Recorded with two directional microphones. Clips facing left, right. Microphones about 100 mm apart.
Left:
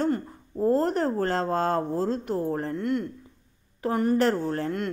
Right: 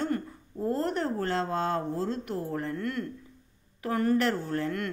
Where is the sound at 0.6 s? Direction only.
40° left (ahead or behind).